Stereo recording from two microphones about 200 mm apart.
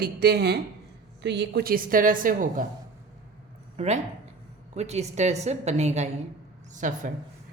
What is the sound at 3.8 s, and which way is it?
A woman's voice, 35° right (ahead or behind).